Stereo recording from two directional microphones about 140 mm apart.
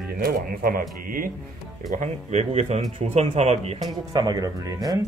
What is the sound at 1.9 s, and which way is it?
Speech, 60° right (ahead or behind).